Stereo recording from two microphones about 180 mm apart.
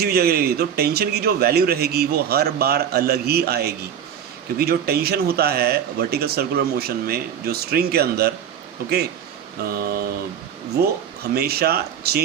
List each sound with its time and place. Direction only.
0.0 s speech: 60° right (ahead or behind)
9.6 s speech: 55° right (ahead or behind)
11.3 s speech: 60° right (ahead or behind)